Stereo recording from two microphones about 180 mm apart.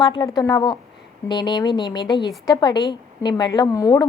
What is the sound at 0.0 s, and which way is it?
A woman's voice, 25° left (ahead or behind).